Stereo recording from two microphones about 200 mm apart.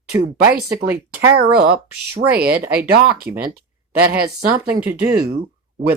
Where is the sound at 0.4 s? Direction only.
55° right (ahead or behind).